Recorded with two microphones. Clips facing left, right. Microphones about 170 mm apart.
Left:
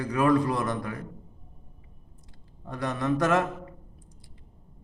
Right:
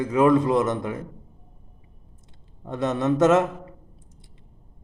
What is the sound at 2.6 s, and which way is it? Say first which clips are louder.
Speech: right 6 dB; 20° right (ahead or behind).